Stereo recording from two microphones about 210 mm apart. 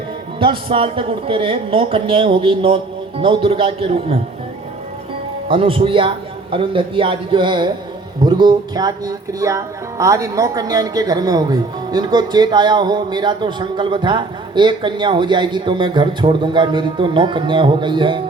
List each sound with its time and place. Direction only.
0.3 s speech: 25° right (ahead or behind)
5.5 s speech: 25° right (ahead or behind)